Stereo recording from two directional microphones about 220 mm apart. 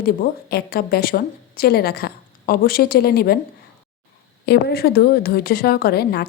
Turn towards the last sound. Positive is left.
turn(degrees=45)  # may be behind; listen again after turning